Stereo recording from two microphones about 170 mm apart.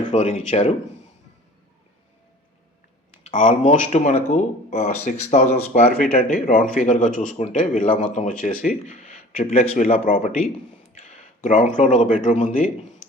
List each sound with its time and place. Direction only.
0.0 s speech: 40° left (ahead or behind)
3.3 s a man's voice: 45° left (ahead or behind)
5.8 s a man's voice: 60° left (ahead or behind)